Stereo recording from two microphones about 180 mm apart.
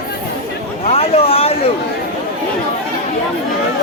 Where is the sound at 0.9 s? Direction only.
35° left (ahead or behind).